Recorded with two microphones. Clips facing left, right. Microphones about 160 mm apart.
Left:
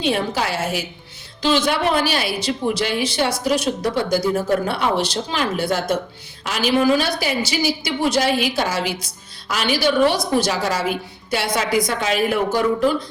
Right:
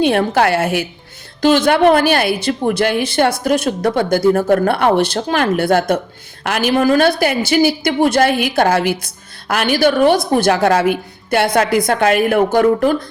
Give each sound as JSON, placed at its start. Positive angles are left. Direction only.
{"t": 0.0, "sound": "a woman's voice", "side_deg": -55}